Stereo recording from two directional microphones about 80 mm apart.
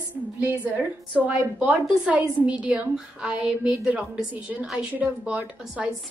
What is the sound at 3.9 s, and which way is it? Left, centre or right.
A woman's voice, centre.